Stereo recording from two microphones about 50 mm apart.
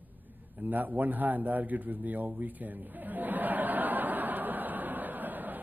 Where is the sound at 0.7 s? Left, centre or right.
Right.